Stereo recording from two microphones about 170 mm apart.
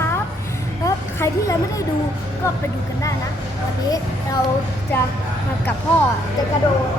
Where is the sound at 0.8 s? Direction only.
20° left (ahead or behind).